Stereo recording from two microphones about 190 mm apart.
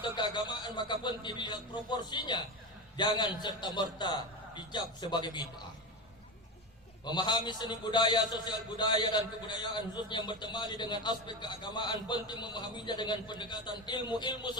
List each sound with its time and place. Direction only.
0.0 s a man's voice: 25° left (ahead or behind)
7.0 s a man's voice: 20° left (ahead or behind)